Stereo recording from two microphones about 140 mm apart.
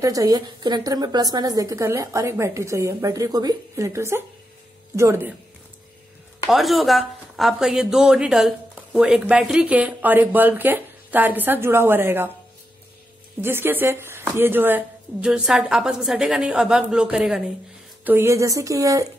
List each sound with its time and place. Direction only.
0.0 s a woman's voice: 25° right (ahead or behind)
6.5 s a woman's voice: centre (ahead or behind); by 12.3 s 15° right (ahead or behind)
13.4 s a woman's voice: 15° right (ahead or behind)
18.0 s a woman's voice: 15° right (ahead or behind)